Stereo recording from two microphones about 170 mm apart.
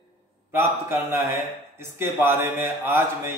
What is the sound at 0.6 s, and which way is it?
A man's voice, 15° right (ahead or behind).